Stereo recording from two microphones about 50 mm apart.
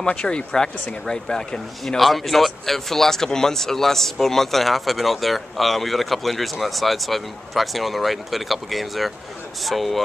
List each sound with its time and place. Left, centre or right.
0.0 s a man's voice: centre
2.0 s speech: centre